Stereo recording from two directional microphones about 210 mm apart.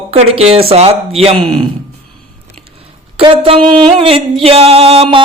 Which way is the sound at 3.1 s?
25° right (ahead or behind).